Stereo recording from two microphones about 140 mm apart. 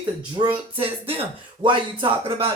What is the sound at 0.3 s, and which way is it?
Speech, 35° right (ahead or behind).